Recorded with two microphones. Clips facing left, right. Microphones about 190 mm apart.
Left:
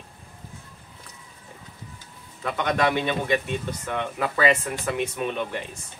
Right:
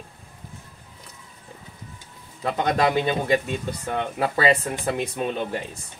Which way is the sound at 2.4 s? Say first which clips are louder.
Right 2 dB; 35° right (ahead or behind).